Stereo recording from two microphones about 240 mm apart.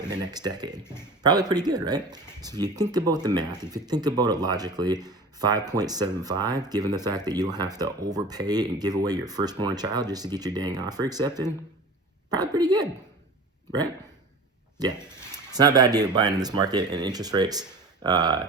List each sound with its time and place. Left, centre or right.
0.0 s speech: centre
15.3 s speech: centre